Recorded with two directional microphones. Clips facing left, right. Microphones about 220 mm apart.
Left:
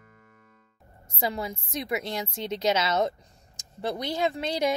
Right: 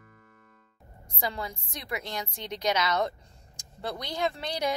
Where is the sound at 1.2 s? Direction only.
20° left (ahead or behind).